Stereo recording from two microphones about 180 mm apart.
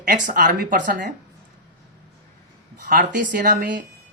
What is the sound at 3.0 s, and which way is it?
Speech, 45° right (ahead or behind).